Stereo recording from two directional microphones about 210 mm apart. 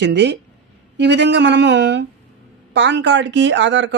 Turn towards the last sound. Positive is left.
turn(degrees=-60)  # may be behind; listen again after turning